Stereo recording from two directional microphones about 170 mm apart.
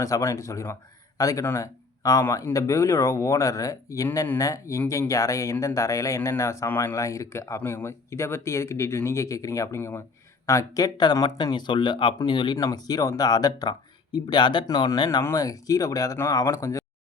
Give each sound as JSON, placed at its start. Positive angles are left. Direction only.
{"t": 0.0, "sound": "speech", "side_deg": 15}